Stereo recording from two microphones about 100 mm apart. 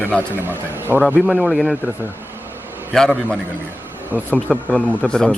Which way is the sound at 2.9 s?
5° left (ahead or behind).